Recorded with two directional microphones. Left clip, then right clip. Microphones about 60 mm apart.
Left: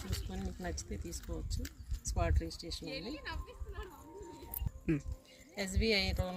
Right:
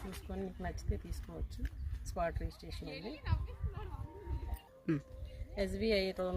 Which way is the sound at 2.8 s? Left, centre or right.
Centre.